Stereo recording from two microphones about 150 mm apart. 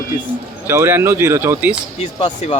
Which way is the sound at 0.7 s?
15° right (ahead or behind).